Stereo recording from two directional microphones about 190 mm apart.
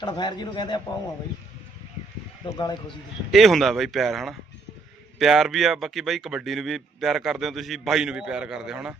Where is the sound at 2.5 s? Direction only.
20° left (ahead or behind).